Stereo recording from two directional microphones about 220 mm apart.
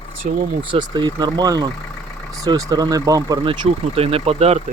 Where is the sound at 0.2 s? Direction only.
35° right (ahead or behind).